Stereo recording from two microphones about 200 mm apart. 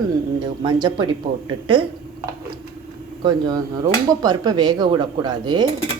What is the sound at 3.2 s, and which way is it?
Speech, 20° right (ahead or behind).